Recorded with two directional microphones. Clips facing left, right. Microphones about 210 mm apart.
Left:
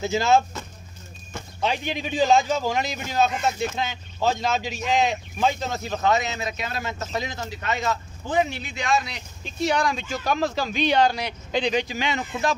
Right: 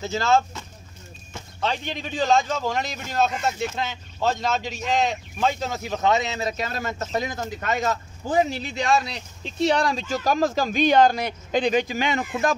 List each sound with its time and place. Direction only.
0.0 s speech: 10° left (ahead or behind)
1.6 s a man's voice: 10° left (ahead or behind); by 5.9 s 10° right (ahead or behind)
6.0 s speech: 30° right (ahead or behind); by 12.5 s 50° right (ahead or behind)